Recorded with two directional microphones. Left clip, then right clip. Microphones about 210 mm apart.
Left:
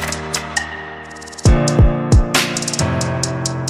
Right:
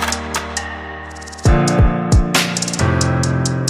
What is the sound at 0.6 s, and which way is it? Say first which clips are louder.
Music: left 2 dB; centre (ahead or behind).